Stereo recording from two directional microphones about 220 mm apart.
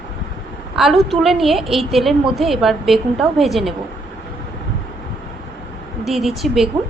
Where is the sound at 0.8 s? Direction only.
Centre (ahead or behind).